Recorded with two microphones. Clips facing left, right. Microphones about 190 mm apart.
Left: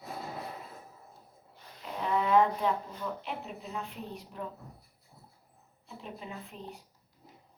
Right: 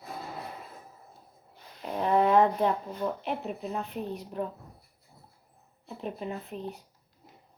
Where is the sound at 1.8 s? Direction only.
55° right (ahead or behind).